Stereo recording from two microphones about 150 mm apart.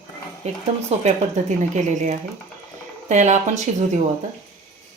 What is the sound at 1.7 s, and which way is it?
Speech, 55° right (ahead or behind).